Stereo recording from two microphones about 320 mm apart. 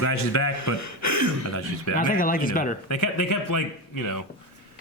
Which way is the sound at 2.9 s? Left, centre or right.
Left.